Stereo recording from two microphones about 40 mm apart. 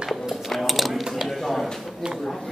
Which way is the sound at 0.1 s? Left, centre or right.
Centre.